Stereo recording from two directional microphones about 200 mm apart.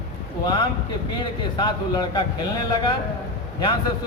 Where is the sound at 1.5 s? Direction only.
25° left (ahead or behind).